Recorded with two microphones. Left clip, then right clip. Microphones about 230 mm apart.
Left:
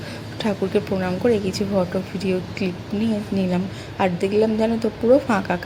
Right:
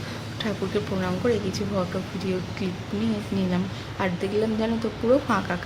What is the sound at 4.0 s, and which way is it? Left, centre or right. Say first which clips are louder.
Speech: left 6 dB; centre.